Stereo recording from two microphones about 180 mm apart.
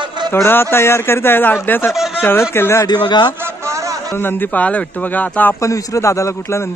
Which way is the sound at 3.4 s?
15° right (ahead or behind).